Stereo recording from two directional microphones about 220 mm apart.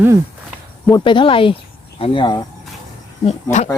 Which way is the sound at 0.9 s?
20° left (ahead or behind).